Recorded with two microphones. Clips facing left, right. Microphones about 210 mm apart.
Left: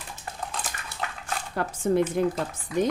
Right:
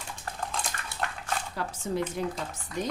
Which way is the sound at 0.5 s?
Centre (ahead or behind).